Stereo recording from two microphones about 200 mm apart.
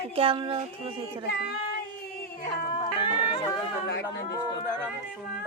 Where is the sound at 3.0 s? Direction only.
25° left (ahead or behind).